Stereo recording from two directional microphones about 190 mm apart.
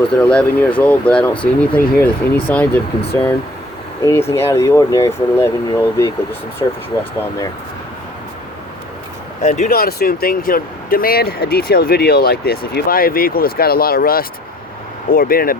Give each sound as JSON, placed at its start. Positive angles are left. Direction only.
{"t": 0.1, "sound": "speech", "side_deg": 5}
{"t": 4.0, "sound": "speech", "side_deg": 15}
{"t": 9.4, "sound": "speech", "side_deg": 45}